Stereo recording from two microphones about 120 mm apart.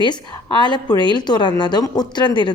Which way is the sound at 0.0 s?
40° left (ahead or behind).